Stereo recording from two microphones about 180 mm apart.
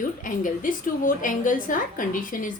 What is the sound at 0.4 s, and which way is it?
A woman's voice, 50° left (ahead or behind).